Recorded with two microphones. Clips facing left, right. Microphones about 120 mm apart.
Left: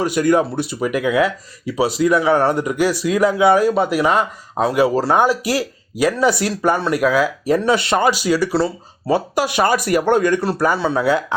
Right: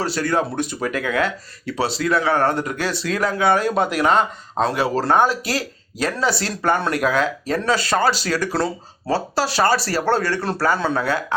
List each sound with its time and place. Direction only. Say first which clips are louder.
0.0 s speech: left 5 dB; 15° left (ahead or behind)
9.1 s speech: left 2 dB; 15° left (ahead or behind)